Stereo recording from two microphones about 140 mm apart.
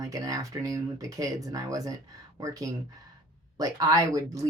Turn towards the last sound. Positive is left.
turn(degrees=-25)  # may be behind; listen again after turning